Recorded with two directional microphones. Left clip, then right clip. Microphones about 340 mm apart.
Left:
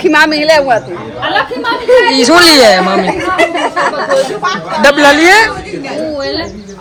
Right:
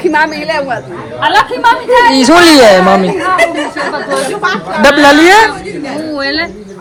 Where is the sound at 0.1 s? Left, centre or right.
Left.